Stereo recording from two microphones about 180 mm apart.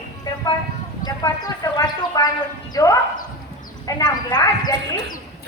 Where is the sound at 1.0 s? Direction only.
20° left (ahead or behind).